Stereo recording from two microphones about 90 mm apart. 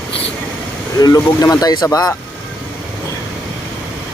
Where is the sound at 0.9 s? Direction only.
40° left (ahead or behind).